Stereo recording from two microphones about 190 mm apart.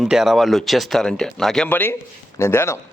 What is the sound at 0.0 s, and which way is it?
A man's voice, centre (ahead or behind).